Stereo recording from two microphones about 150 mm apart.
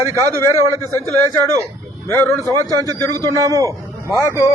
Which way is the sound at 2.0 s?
15° left (ahead or behind).